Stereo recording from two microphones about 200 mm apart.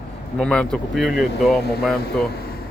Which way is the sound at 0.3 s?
5° left (ahead or behind).